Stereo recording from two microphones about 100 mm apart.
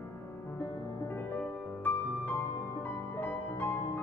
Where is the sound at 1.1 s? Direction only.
20° left (ahead or behind).